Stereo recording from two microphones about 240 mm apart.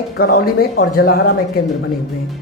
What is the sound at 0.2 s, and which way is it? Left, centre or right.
A man's voice, left.